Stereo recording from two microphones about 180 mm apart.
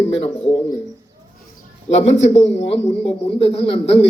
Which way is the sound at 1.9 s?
35° left (ahead or behind).